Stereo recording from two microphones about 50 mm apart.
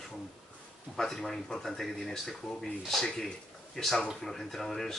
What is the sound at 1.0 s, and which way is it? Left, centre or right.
Speech, centre.